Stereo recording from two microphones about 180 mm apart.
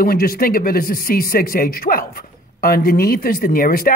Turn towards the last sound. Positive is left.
turn(degrees=55)  # may be behind; listen again after turning